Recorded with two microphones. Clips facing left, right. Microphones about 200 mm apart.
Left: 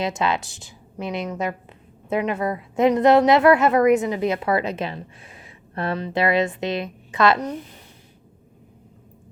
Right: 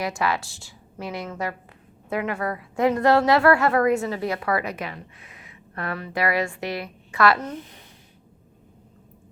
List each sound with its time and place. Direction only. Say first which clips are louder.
0.0 s a woman's voice: left 2 dB; 20° left (ahead or behind)